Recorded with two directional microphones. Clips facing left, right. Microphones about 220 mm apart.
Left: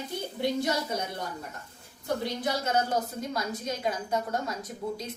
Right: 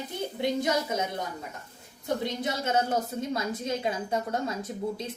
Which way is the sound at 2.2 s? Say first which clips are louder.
Even; 25° right (ahead or behind).